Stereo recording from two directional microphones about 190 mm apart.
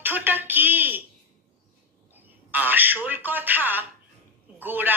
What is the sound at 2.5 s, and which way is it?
Telephone, 10° right (ahead or behind).